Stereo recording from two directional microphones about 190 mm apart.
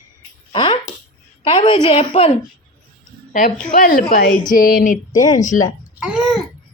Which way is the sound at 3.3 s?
45° left (ahead or behind).